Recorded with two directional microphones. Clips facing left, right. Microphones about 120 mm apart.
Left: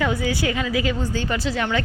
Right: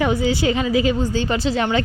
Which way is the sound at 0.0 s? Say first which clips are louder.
Right 4 dB; 25° right (ahead or behind).